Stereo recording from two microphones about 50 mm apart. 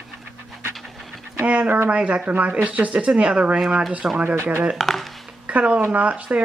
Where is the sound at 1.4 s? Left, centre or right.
Right.